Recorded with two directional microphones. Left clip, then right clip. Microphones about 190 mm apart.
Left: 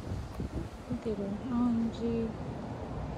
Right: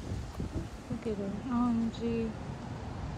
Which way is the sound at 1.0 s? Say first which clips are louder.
Even; 10° left (ahead or behind).